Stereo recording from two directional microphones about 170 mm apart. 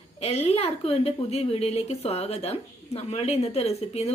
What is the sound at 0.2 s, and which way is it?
A woman's voice, 40° left (ahead or behind).